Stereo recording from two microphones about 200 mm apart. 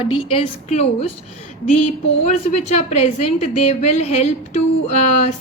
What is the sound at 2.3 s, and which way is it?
A woman's voice, 35° left (ahead or behind).